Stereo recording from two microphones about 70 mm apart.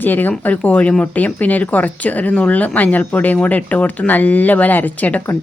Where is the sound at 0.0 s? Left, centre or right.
Left.